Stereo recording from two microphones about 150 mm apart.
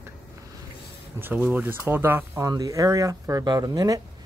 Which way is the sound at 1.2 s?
10° right (ahead or behind).